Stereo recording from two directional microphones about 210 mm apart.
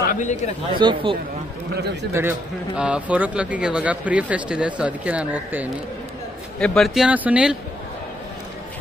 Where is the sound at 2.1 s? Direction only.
10° right (ahead or behind).